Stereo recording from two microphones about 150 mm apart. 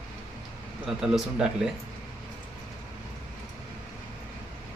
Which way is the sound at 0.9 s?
5° right (ahead or behind).